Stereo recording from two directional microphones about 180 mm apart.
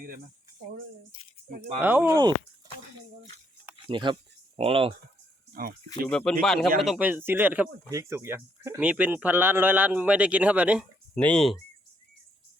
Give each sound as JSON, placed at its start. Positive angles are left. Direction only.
{"t": 1.5, "sound": "speech", "side_deg": -50}
{"t": 1.8, "sound": "speech", "side_deg": -10}
{"t": 3.8, "sound": "speech", "side_deg": -25}
{"t": 5.6, "sound": "speech", "side_deg": -50}
{"t": 6.1, "sound": "speech", "side_deg": 5}
{"t": 11.1, "sound": "speech", "side_deg": 5}